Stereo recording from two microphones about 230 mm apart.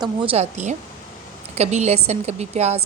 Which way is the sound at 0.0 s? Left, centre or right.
Right.